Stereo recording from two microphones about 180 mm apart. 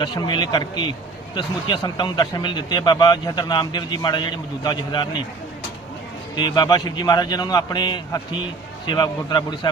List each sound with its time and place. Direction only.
0.0 s speech: 25° left (ahead or behind)
6.3 s speech: 25° left (ahead or behind)